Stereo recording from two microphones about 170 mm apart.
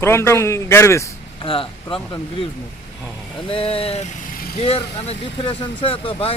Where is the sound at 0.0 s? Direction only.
15° left (ahead or behind).